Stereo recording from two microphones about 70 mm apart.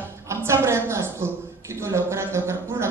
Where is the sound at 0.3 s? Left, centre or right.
Right.